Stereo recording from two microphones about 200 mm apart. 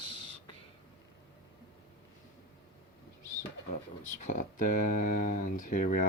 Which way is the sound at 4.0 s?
40° left (ahead or behind).